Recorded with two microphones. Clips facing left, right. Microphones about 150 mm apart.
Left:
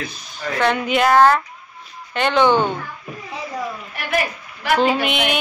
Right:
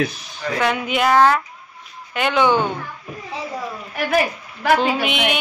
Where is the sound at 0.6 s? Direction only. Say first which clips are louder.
Left 2 dB; 5° right (ahead or behind).